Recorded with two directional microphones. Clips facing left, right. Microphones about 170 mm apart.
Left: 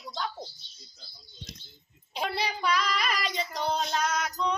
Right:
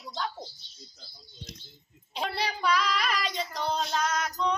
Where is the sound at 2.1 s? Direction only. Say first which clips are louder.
Left 1 dB; 5° left (ahead or behind).